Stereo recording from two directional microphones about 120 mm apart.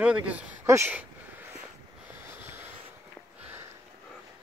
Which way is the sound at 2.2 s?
20° right (ahead or behind).